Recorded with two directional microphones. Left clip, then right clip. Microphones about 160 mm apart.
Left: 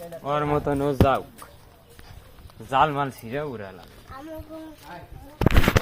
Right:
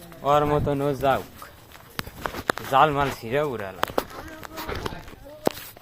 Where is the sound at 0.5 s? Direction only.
30° right (ahead or behind).